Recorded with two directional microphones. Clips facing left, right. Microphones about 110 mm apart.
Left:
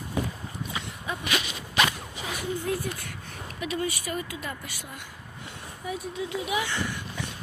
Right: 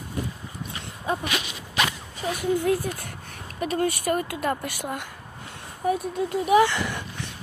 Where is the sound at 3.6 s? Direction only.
45° right (ahead or behind).